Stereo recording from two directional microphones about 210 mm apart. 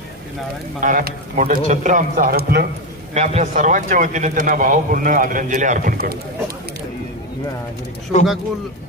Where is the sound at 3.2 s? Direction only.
35° right (ahead or behind).